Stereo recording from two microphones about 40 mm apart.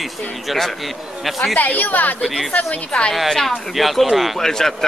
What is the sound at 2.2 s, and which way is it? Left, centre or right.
Speech, centre.